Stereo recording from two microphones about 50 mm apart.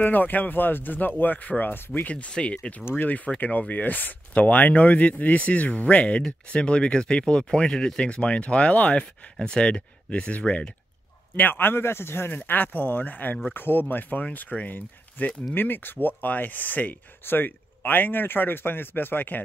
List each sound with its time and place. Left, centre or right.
0.0 s speech: left
3.3 s speech: left
11.3 s a man's voice: left
12.4 s a man's voice: left